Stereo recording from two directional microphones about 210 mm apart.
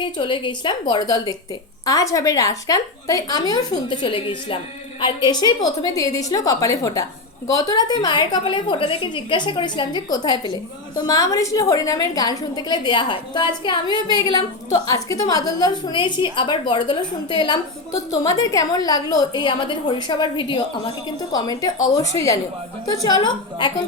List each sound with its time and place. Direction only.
0.0 s a woman's voice: 25° left (ahead or behind)